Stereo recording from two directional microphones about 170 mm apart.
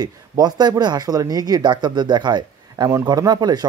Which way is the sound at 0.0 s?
25° right (ahead or behind).